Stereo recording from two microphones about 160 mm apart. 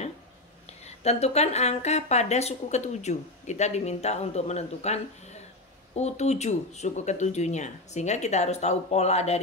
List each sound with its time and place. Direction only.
0.8 s a woman's voice: 40° left (ahead or behind)